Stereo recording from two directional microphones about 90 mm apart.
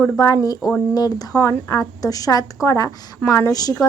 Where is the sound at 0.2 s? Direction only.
40° left (ahead or behind).